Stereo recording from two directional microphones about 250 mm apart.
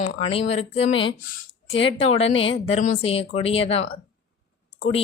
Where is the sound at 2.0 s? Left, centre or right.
Left.